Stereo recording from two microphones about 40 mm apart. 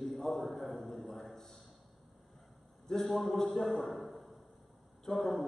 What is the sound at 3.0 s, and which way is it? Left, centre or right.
Speech, centre.